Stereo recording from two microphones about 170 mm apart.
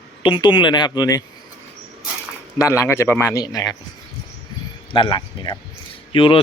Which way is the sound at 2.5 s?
20° left (ahead or behind).